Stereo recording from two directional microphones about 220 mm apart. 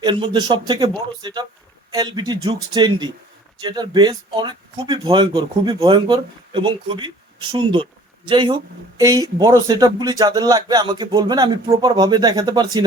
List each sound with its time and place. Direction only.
0.0 s a man's voice: 20° right (ahead or behind)